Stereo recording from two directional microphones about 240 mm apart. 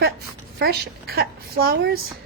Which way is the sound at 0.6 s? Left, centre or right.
Right.